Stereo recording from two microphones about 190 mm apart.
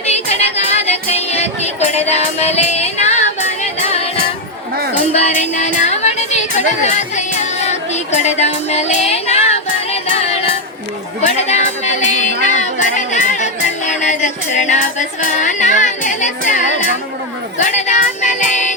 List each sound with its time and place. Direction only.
0.1 s music: 35° left (ahead or behind)
5.1 s music: 35° left (ahead or behind)
17.6 s child singing: 40° left (ahead or behind)